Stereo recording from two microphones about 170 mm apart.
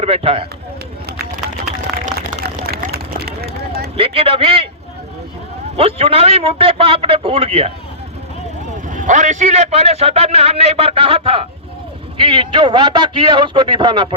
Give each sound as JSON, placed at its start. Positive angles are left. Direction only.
{"t": 0.0, "sound": "a man's voice", "side_deg": -35}
{"t": 2.4, "sound": "run", "side_deg": -65}
{"t": 3.9, "sound": "a man's voice", "side_deg": -35}
{"t": 5.7, "sound": "a man's voice", "side_deg": -35}
{"t": 8.9, "sound": "a man's voice", "side_deg": -50}